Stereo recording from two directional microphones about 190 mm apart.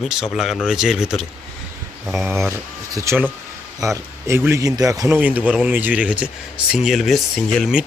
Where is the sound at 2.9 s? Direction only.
15° right (ahead or behind).